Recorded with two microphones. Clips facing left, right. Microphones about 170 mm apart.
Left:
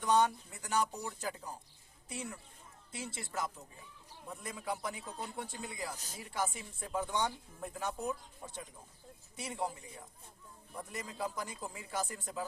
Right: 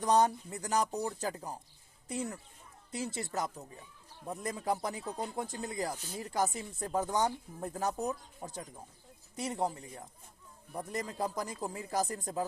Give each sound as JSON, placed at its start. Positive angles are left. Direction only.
{"t": 0.0, "sound": "speech", "side_deg": -40}
{"t": 2.9, "sound": "speech", "side_deg": -40}
{"t": 10.8, "sound": "speech", "side_deg": -40}